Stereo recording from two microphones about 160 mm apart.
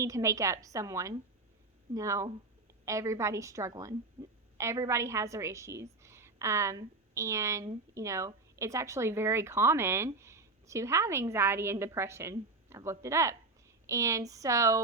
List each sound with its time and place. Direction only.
0.0 s a woman's voice: 20° right (ahead or behind)